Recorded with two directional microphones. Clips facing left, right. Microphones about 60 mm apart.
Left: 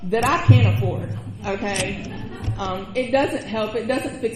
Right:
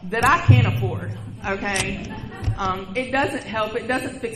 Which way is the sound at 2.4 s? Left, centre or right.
Right.